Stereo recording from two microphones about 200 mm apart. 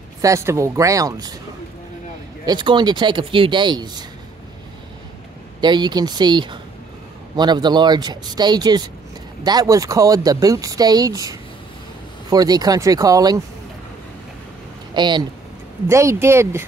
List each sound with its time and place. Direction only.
0.2 s speech: 15° right (ahead or behind)
2.4 s speech: 20° right (ahead or behind)
5.6 s speech: 20° right (ahead or behind)
15.0 s speech: 20° right (ahead or behind)